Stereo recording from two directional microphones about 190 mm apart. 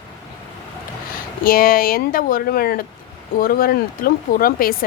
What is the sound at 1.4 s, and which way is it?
Speech, 50° left (ahead or behind).